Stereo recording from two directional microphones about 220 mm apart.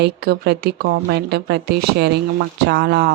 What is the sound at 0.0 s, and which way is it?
Speech, 45° right (ahead or behind).